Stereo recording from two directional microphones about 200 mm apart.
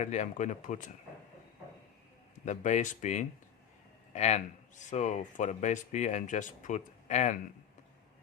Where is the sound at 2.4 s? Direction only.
35° left (ahead or behind).